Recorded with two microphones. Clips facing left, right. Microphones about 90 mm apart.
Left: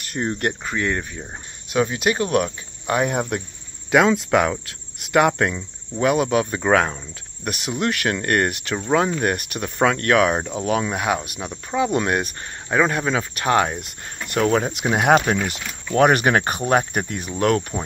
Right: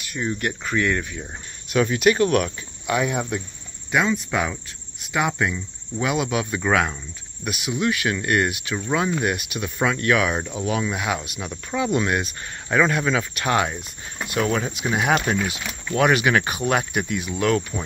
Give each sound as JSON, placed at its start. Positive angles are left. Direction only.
{"t": 0.1, "sound": "speech", "side_deg": 50}
{"t": 0.7, "sound": "speech", "side_deg": 25}
{"t": 2.9, "sound": "speech", "side_deg": 50}
{"t": 3.9, "sound": "speech", "side_deg": 90}
{"t": 7.4, "sound": "speech", "side_deg": 55}
{"t": 12.0, "sound": "speech", "side_deg": 45}
{"t": 12.8, "sound": "speech", "side_deg": 35}
{"t": 14.8, "sound": "speech", "side_deg": 55}
{"t": 17.0, "sound": "speech", "side_deg": 50}
{"t": 17.3, "sound": "speech", "side_deg": 40}